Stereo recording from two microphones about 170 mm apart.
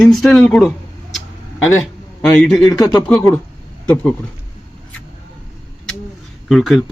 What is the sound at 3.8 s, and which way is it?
Speech, 10° left (ahead or behind).